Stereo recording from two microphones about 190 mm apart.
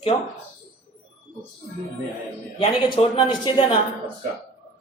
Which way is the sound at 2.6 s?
30° left (ahead or behind).